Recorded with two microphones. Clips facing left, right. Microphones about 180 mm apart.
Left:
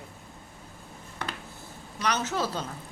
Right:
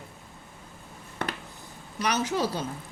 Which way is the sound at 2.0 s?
10° right (ahead or behind).